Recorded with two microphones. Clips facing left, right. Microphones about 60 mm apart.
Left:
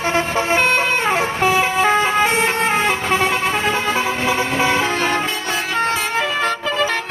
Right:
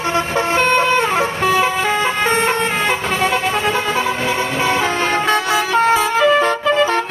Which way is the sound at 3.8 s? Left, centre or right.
Centre.